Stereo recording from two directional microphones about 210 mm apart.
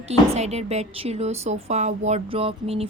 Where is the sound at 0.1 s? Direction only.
30° right (ahead or behind).